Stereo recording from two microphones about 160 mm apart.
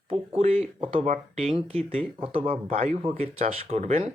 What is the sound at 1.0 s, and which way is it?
Speech, 45° right (ahead or behind).